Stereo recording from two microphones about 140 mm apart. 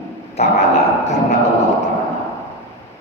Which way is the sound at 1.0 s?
55° left (ahead or behind).